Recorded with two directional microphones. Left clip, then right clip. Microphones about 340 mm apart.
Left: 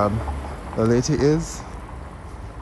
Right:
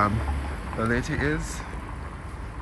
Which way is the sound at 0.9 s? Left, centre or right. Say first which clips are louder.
Left 7 dB; centre.